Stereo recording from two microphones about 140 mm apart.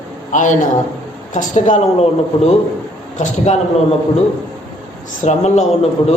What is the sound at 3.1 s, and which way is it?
Speech, 55° left (ahead or behind).